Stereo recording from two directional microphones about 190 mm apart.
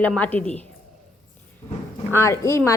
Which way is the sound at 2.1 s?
15° left (ahead or behind).